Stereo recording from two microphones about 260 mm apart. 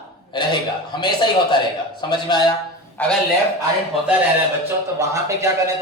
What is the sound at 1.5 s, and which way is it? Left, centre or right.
A man's voice, centre.